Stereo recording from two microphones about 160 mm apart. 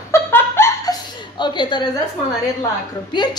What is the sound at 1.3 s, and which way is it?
Speech, 30° left (ahead or behind).